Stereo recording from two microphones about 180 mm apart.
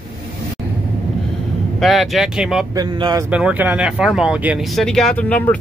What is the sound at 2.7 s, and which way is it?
Speech, 20° right (ahead or behind).